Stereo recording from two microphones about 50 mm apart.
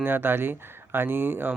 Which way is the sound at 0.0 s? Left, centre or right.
Right.